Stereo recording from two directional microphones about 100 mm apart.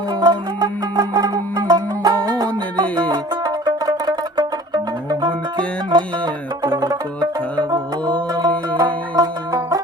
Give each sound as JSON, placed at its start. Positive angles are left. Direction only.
{"t": 0.2, "sound": "music", "side_deg": -45}
{"t": 8.4, "sound": "music", "side_deg": -45}